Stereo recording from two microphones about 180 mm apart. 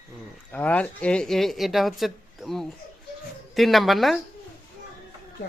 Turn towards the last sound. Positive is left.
turn(degrees=0)  # may be behind; listen again after turning